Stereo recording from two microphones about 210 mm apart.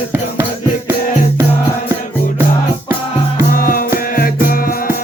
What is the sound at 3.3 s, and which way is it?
Music, 45° left (ahead or behind).